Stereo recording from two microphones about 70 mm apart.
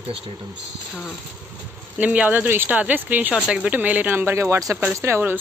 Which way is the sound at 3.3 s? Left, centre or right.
Centre.